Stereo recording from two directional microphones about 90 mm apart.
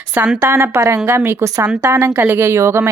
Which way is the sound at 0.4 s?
35° right (ahead or behind).